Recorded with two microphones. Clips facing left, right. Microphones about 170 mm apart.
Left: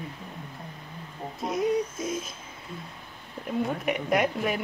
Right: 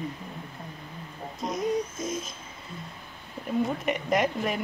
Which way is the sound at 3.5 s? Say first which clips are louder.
Right 1 dB; centre (ahead or behind).